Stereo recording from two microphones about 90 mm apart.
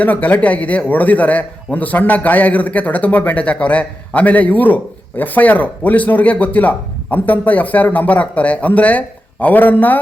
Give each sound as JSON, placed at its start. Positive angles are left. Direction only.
{"t": 0.0, "sound": "speech", "side_deg": 15}